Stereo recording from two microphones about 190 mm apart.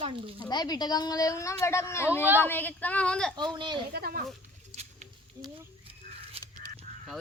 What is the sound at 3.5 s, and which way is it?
Speech, 25° right (ahead or behind).